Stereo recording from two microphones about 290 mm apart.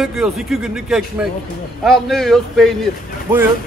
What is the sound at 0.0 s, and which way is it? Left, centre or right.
Speech, centre.